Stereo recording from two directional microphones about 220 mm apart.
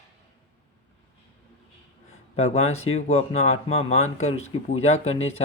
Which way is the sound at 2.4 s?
30° left (ahead or behind).